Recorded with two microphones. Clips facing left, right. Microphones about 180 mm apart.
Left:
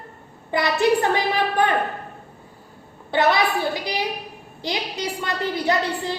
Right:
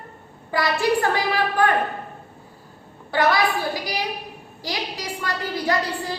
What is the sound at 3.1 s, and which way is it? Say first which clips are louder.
Speech: left 1 dB; 25° left (ahead or behind).